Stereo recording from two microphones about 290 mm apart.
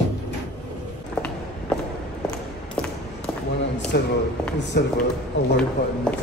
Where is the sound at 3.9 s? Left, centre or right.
Left.